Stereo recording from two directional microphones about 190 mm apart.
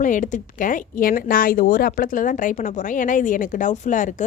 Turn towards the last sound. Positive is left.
turn(degrees=40)  # may be behind; listen again after turning